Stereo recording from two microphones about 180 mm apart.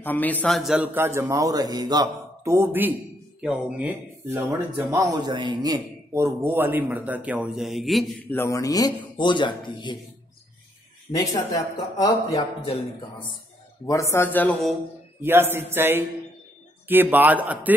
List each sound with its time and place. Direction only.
0.0 s speech: 10° left (ahead or behind)
8.3 s a man's voice: 15° left (ahead or behind)
11.2 s a man's voice: 20° left (ahead or behind)
13.8 s a man's voice: 15° left (ahead or behind)
15.2 s speech: 10° right (ahead or behind)